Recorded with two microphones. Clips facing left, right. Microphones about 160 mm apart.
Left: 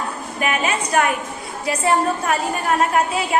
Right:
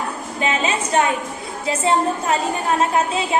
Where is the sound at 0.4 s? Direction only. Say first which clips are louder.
Even; 25° right (ahead or behind).